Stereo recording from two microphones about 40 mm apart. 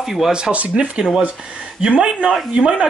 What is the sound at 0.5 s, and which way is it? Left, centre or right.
Speech, right.